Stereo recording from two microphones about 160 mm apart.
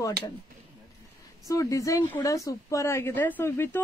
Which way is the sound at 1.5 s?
20° left (ahead or behind).